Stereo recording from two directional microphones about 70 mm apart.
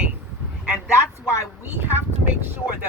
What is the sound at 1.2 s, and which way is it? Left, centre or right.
Speech, left.